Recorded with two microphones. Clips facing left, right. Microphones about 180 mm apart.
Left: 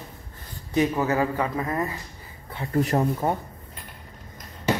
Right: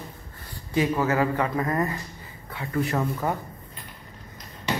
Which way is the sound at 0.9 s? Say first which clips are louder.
Even; 15° left (ahead or behind).